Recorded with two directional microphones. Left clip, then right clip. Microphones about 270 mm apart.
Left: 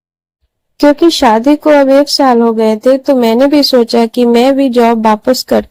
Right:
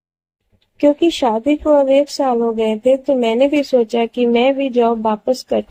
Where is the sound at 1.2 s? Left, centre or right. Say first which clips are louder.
Left 8 dB; left.